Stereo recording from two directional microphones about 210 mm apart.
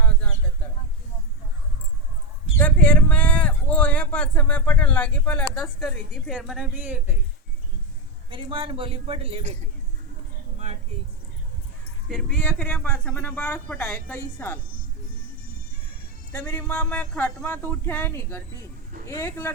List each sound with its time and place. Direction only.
0.0 s a sound: 5° left (ahead or behind)
2.6 s speech: 5° left (ahead or behind)
8.3 s speech: 25° right (ahead or behind)
12.0 s speech: centre (ahead or behind)
16.3 s speech: 10° left (ahead or behind)